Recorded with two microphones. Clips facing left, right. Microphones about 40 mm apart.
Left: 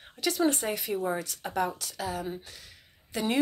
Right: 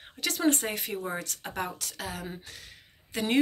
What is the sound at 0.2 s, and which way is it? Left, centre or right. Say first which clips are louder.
Speech: even; right.